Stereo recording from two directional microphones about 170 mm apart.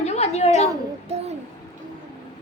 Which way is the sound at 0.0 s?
40° left (ahead or behind).